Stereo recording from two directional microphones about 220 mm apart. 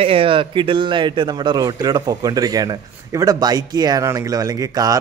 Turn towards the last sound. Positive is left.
turn(degrees=-15)  # may be behind; listen again after turning